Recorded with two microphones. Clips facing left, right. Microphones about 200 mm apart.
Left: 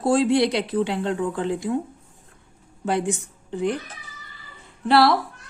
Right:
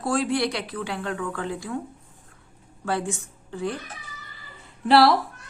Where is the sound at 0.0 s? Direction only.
25° left (ahead or behind).